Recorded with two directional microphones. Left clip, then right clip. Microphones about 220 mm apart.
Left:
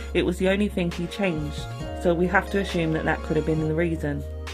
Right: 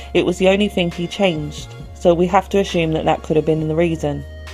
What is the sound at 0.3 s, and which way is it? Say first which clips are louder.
Speech: right 8 dB; 25° right (ahead or behind).